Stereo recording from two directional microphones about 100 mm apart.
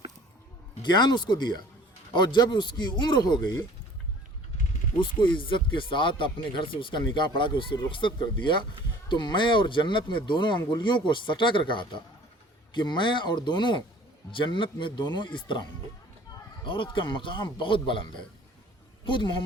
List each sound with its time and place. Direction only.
0.8 s speech: 45° left (ahead or behind)
4.9 s speech: 55° left (ahead or behind)
16.6 s speech: 55° left (ahead or behind)